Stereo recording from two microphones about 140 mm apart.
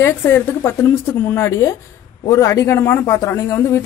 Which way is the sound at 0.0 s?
15° left (ahead or behind).